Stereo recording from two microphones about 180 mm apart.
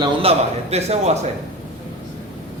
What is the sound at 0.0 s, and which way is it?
A man's voice, 35° right (ahead or behind).